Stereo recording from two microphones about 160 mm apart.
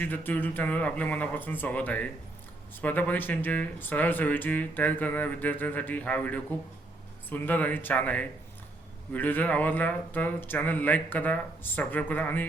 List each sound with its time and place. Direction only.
0.0 s speech: 10° left (ahead or behind)